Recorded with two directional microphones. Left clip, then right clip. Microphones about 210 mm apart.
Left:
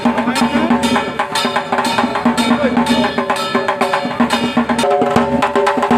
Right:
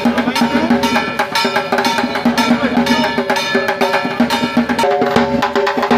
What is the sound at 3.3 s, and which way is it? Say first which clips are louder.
Music: right 1 dB; 50° right (ahead or behind).